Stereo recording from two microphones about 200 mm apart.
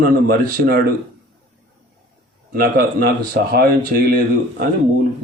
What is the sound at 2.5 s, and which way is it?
Speech, 50° right (ahead or behind).